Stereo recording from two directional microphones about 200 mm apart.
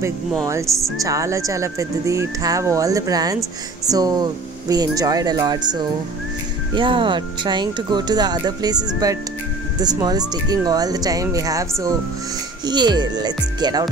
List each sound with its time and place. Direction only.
0.9 s speech: 15° right (ahead or behind)
12.6 s speech: 20° right (ahead or behind)